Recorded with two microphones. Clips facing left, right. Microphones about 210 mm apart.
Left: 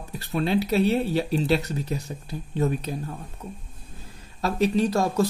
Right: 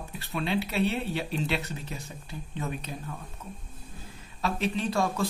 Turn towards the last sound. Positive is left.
turn(degrees=40)  # may be behind; listen again after turning